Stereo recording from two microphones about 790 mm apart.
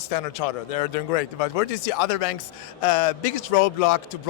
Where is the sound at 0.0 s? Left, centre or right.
Left.